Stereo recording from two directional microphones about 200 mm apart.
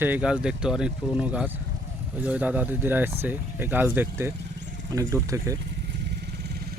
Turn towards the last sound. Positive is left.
turn(degrees=-15)  # may be behind; listen again after turning